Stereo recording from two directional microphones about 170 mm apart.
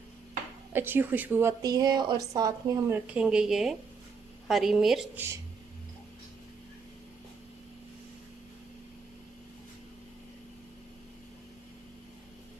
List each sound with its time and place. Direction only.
0.7 s speech: 10° right (ahead or behind)